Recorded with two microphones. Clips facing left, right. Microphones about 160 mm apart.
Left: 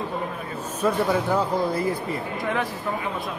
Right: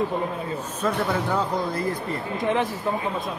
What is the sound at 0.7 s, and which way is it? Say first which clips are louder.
Speech: left 3 dB; 10° left (ahead or behind).